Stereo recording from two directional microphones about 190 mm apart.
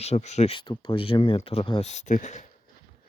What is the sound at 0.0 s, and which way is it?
Speech, 35° left (ahead or behind).